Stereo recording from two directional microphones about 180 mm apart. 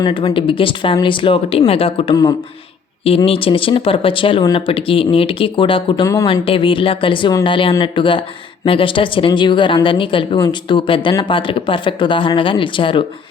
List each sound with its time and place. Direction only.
0.0 s speech: 25° left (ahead or behind)
3.2 s speech: 30° left (ahead or behind)